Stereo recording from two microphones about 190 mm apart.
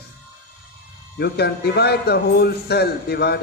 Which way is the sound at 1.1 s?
60° left (ahead or behind).